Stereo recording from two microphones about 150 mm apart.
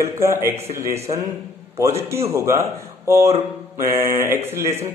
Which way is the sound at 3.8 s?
20° right (ahead or behind).